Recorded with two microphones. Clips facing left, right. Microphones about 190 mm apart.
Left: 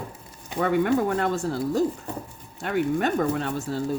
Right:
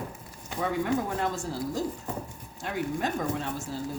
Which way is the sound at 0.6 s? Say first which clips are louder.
Left 6 dB; 65° left (ahead or behind).